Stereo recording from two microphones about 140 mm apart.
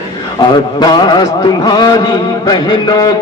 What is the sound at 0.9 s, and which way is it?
A man's voice, 30° left (ahead or behind).